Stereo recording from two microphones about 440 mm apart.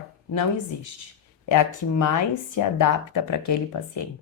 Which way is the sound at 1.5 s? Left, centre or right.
Left.